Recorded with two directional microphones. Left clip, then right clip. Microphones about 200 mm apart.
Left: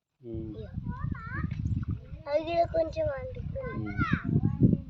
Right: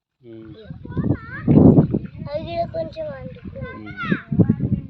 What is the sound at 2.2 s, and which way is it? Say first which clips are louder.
Speech: left 1 dB; centre (ahead or behind).